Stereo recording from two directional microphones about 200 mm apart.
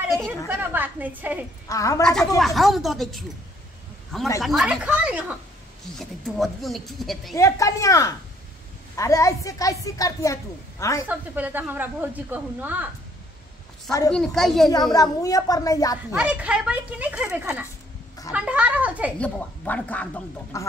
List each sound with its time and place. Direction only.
0.5 s speech: 10° right (ahead or behind)
1.7 s a woman's voice: 15° left (ahead or behind)
2.0 s speech: centre (ahead or behind)
4.4 s speech: centre (ahead or behind)
7.3 s a woman's voice: 15° left (ahead or behind)
11.1 s speech: 10° right (ahead or behind)
14.1 s speech: centre (ahead or behind)
14.7 s a woman's voice: 20° left (ahead or behind)
16.1 s speech: 5° right (ahead or behind)
19.1 s a woman's voice: 5° left (ahead or behind)